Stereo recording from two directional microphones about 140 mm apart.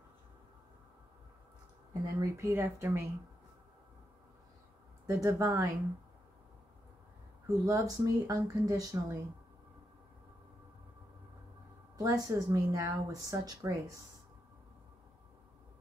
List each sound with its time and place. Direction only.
2.1 s speech: 20° right (ahead or behind)
5.0 s speech: 20° right (ahead or behind)
7.4 s speech: 25° right (ahead or behind)
12.0 s speech: 25° right (ahead or behind)